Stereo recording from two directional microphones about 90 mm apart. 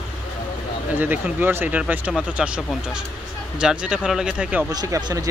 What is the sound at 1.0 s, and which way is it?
Speech, 20° right (ahead or behind).